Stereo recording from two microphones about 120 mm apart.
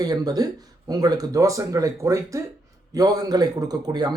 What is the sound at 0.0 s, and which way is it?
A man's voice, 30° right (ahead or behind).